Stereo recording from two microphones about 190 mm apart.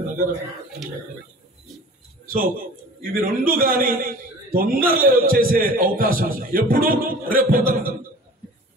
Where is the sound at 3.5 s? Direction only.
50° right (ahead or behind).